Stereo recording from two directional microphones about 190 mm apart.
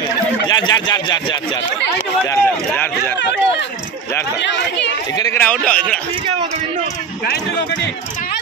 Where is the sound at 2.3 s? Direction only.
10° left (ahead or behind).